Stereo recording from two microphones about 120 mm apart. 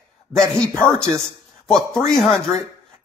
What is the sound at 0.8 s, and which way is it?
Speech, 20° right (ahead or behind).